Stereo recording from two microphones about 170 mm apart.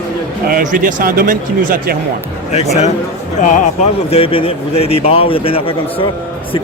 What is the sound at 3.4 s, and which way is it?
Speech, 50° left (ahead or behind).